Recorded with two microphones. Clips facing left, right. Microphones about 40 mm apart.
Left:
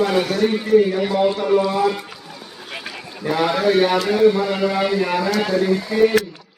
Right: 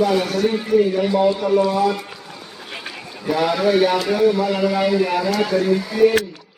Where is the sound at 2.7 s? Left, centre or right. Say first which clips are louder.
Left 1 dB; centre.